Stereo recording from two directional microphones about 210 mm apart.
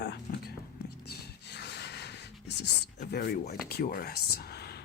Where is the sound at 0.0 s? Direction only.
50° left (ahead or behind).